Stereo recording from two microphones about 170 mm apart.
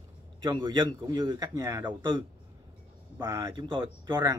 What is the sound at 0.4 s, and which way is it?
A man's voice, 30° right (ahead or behind).